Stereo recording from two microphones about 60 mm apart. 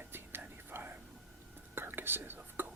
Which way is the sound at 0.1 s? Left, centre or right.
Right.